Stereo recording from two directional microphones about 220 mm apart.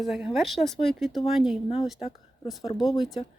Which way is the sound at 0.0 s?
Centre (ahead or behind).